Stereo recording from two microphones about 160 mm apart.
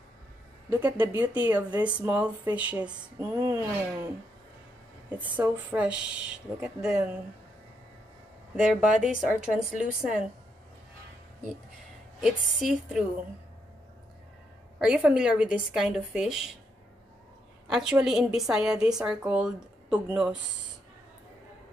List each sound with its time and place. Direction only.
0.7 s speech: 10° right (ahead or behind)
5.1 s speech: 10° right (ahead or behind)
8.5 s a woman's voice: centre (ahead or behind)
12.2 s a woman's voice: 5° right (ahead or behind)
14.8 s a woman's voice: 5° right (ahead or behind)
17.6 s a woman's voice: 5° right (ahead or behind)